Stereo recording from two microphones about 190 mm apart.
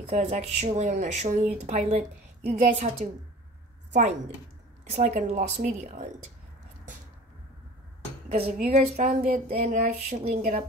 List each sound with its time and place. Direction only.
0.1 s speech: 35° right (ahead or behind)
3.9 s speech: 40° right (ahead or behind)
8.7 s speech: 35° right (ahead or behind)
9.3 s a sound: 50° right (ahead or behind)
10.0 s speech: 40° right (ahead or behind)